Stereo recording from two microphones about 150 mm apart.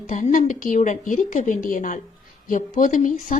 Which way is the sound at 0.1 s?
55° left (ahead or behind).